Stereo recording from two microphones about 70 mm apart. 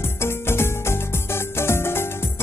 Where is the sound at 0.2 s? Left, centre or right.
Left.